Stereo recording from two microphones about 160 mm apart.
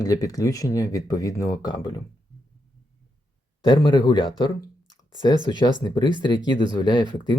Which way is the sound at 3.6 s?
30° left (ahead or behind).